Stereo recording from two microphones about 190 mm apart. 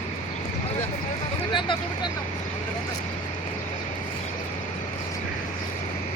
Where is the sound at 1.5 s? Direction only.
25° left (ahead or behind).